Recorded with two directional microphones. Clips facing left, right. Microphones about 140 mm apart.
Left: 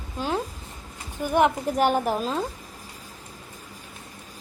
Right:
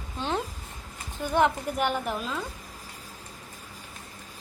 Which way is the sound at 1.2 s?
15° left (ahead or behind).